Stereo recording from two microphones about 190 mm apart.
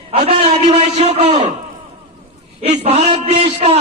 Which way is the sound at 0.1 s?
30° right (ahead or behind).